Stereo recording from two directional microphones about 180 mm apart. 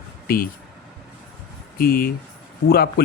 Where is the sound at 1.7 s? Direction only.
55° left (ahead or behind).